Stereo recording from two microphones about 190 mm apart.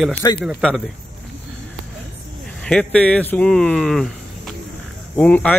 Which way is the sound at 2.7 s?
5° left (ahead or behind).